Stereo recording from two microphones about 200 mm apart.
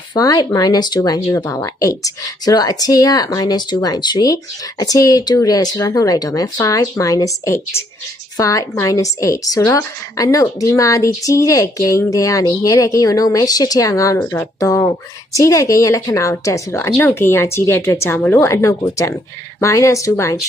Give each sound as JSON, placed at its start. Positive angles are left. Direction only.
{"t": 0.1, "sound": "a woman's voice", "side_deg": 20}